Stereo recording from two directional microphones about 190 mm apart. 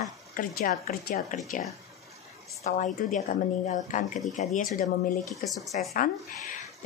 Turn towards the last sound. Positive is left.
turn(degrees=35)  # may be behind; listen again after turning